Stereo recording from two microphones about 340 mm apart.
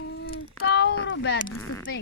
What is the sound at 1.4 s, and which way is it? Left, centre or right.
Speech, centre.